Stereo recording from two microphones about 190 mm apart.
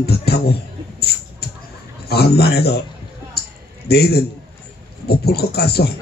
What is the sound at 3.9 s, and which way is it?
A man's voice, 55° left (ahead or behind).